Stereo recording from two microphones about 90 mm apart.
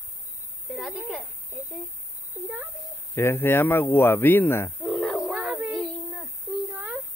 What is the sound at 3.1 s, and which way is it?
Speech, 25° left (ahead or behind).